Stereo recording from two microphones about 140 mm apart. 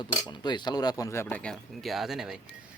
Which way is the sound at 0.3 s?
30° left (ahead or behind).